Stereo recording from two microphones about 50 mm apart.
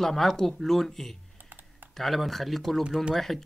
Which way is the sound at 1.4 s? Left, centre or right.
Right.